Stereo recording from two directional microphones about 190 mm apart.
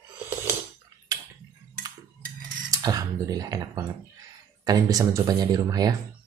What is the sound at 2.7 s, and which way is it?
Speech, 20° right (ahead or behind).